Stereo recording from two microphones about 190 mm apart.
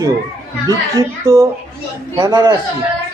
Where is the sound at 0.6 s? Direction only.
15° right (ahead or behind).